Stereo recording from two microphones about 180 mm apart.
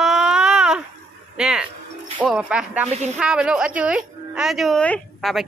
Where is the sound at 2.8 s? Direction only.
40° right (ahead or behind).